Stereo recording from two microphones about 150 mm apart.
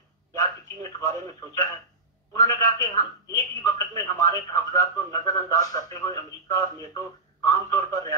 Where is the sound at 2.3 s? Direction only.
25° left (ahead or behind).